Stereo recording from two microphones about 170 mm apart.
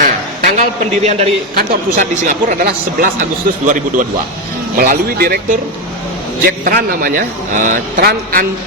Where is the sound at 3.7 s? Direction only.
50° right (ahead or behind).